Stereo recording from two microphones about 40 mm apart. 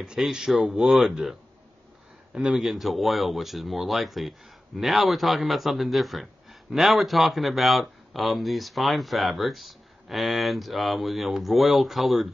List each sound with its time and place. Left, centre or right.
0.2 s speech: centre
2.3 s a man's voice: centre
2.6 s speech: centre